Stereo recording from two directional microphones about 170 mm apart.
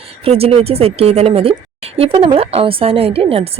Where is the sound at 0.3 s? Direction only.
35° right (ahead or behind).